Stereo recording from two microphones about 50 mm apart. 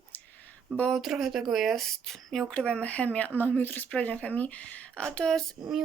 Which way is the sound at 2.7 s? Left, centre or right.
Left.